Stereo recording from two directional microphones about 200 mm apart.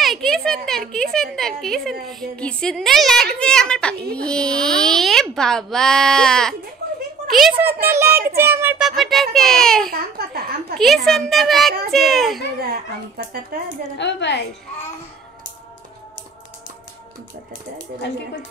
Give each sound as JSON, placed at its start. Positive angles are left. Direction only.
{"t": 0.0, "sound": "a woman's voice", "side_deg": 0}
{"t": 7.9, "sound": "a child's voice", "side_deg": -10}
{"t": 9.8, "sound": "a child's voice", "side_deg": -50}
{"t": 10.8, "sound": "a child's voice", "side_deg": 0}
{"t": 13.2, "sound": "a child's voice", "side_deg": -55}
{"t": 13.9, "sound": "a woman's voice", "side_deg": 60}
{"t": 17.7, "sound": "a woman's voice", "side_deg": 60}